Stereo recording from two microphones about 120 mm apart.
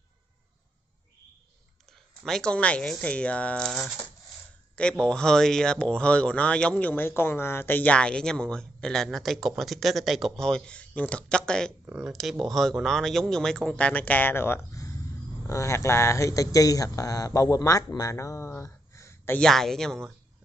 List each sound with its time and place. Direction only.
2.2 s speech: 5° left (ahead or behind)
5.0 s speech: 5° left (ahead or behind)
11.8 s speech: 15° right (ahead or behind)
12.1 s speech: centre (ahead or behind); by 19.3 s 25° left (ahead or behind)
19.3 s speech: 5° left (ahead or behind)